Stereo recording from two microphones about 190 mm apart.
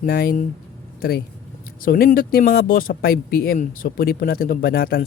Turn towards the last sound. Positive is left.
turn(degrees=50)  # may be behind; listen again after turning